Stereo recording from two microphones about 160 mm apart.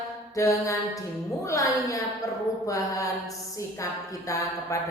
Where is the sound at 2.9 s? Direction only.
20° left (ahead or behind).